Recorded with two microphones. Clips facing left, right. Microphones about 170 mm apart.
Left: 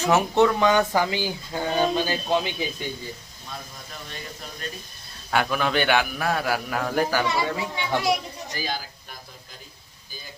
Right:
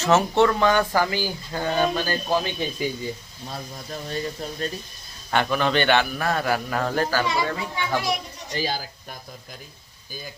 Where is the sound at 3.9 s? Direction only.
35° right (ahead or behind).